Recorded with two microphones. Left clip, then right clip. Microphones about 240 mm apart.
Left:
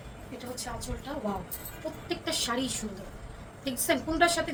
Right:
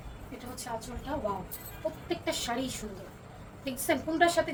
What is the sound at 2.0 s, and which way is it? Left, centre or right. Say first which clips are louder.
A woman's voice: left 3 dB; centre.